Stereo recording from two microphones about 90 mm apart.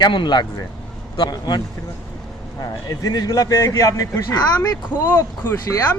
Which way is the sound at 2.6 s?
40° left (ahead or behind).